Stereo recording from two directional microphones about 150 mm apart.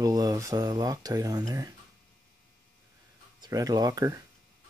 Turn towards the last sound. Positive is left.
turn(degrees=-25)  # may be behind; listen again after turning